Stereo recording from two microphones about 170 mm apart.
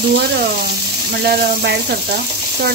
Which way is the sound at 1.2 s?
75° right (ahead or behind).